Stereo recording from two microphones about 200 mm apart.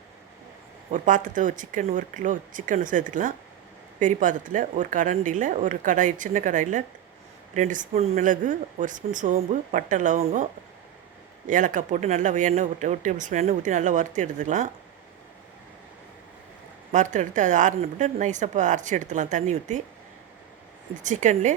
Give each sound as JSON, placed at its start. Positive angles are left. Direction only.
{"t": 0.9, "sound": "speech", "side_deg": -40}
{"t": 11.4, "sound": "speech", "side_deg": -40}
{"t": 16.9, "sound": "speech", "side_deg": -35}
{"t": 21.0, "sound": "speech", "side_deg": -35}